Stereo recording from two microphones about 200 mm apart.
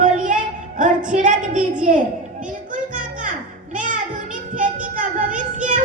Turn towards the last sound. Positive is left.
turn(degrees=-40)  # may be behind; listen again after turning